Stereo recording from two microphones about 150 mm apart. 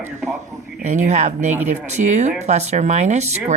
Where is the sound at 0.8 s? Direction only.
55° right (ahead or behind).